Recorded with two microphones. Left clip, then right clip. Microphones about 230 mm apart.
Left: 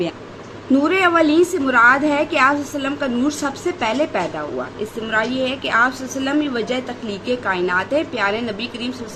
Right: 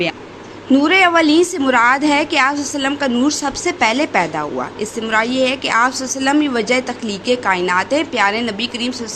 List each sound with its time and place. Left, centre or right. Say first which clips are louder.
0.7 s a woman's voice: right 4 dB; centre